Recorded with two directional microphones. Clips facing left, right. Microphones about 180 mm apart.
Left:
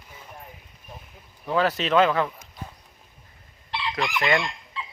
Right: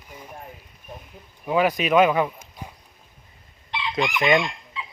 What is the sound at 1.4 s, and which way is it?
Speech, 15° right (ahead or behind).